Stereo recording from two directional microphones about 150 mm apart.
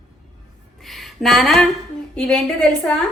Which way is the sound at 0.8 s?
Centre (ahead or behind).